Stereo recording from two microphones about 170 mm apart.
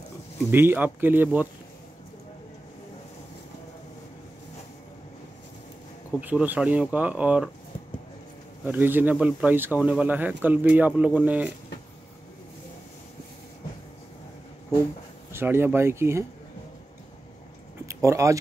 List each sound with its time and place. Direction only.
0.5 s speech: 10° right (ahead or behind)
6.2 s speech: 10° right (ahead or behind)
8.6 s speech: 10° right (ahead or behind)
15.3 s speech: 15° right (ahead or behind)
17.8 s speech: 15° right (ahead or behind)